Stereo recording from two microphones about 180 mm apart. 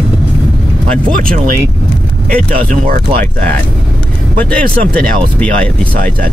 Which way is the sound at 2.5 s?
55° right (ahead or behind).